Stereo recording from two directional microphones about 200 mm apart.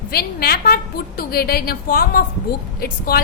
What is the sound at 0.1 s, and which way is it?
A woman's voice, 50° left (ahead or behind).